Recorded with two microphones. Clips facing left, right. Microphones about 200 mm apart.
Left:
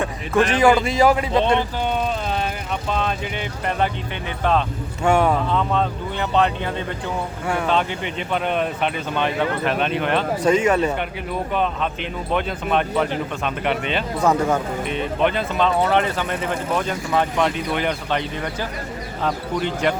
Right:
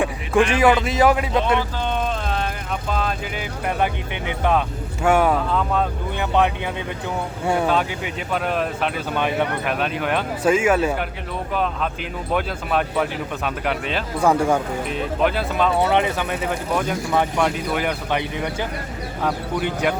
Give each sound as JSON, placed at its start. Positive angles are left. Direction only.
{"t": 0.0, "sound": "a sound", "side_deg": -15}
{"t": 0.6, "sound": "speech", "side_deg": 0}
{"t": 2.9, "sound": "speech", "side_deg": 0}
{"t": 5.0, "sound": "speech", "side_deg": -5}
{"t": 7.4, "sound": "speech", "side_deg": -25}
{"t": 7.7, "sound": "speech", "side_deg": -5}